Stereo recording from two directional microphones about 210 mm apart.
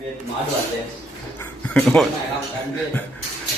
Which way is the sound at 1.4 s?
5° left (ahead or behind).